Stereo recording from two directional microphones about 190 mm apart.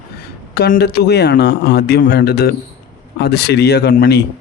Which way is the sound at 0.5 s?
55° left (ahead or behind).